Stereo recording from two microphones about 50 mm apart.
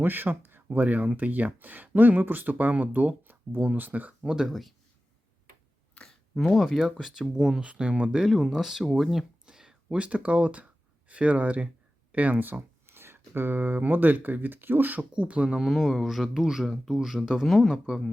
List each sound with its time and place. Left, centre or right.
0.0 s speech: right
0.7 s speech: right
4.2 s speech: centre
6.5 s speech: centre
7.6 s speech: right
8.3 s speech: centre
9.5 s a sound: centre
9.9 s speech: right
15.1 s speech: right
15.4 s speech: centre
15.7 s speech: centre